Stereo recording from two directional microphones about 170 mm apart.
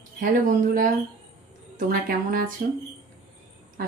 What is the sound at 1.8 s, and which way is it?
Speech, 55° right (ahead or behind).